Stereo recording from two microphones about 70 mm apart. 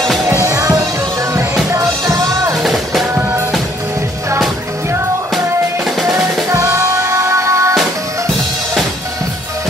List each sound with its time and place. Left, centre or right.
0.3 s music: right
2.5 s music: centre
3.2 s music: right
6.5 s music: right